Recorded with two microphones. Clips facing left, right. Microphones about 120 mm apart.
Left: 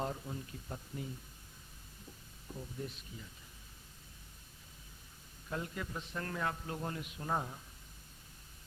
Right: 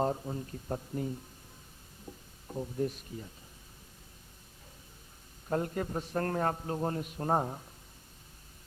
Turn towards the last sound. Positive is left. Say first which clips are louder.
# right 7 dB
turn(degrees=-45)  # may be behind; listen again after turning